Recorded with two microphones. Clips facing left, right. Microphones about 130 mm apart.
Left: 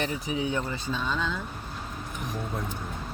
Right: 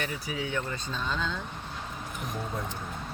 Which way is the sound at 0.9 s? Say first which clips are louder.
Left 3 dB; 5° left (ahead or behind).